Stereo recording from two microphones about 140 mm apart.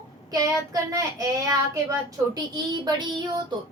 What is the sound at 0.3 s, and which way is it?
Speech, 25° right (ahead or behind).